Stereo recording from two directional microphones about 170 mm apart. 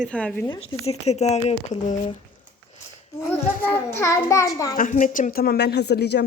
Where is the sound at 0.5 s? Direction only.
35° left (ahead or behind).